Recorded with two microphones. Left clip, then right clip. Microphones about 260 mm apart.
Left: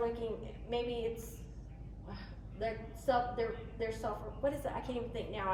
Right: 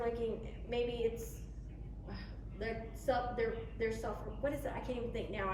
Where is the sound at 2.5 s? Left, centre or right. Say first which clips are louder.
Left 3 dB; centre.